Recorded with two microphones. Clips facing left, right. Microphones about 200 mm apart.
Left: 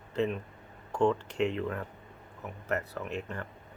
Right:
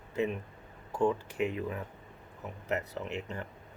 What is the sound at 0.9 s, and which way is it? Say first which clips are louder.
Speech: left 2 dB; 5° right (ahead or behind).